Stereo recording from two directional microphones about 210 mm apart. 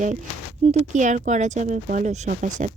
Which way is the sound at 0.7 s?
35° right (ahead or behind).